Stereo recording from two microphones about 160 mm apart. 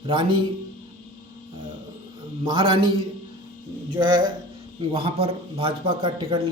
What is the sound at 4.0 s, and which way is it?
A man's voice, 30° right (ahead or behind).